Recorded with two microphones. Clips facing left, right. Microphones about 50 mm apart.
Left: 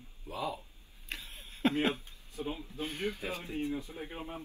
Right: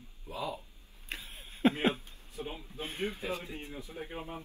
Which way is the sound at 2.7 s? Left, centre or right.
Right.